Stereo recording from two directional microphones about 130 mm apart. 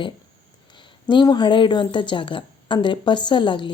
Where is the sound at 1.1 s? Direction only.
35° left (ahead or behind).